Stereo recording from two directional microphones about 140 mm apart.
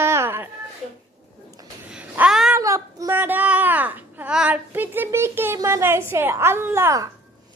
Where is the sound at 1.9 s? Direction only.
10° right (ahead or behind).